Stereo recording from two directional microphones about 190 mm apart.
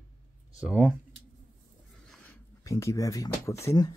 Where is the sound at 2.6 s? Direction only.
15° left (ahead or behind).